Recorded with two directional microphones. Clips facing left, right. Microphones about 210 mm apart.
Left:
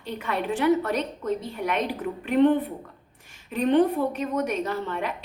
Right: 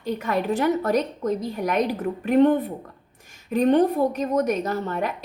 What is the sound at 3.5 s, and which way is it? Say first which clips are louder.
A woman's voice: right 2 dB; 45° right (ahead or behind).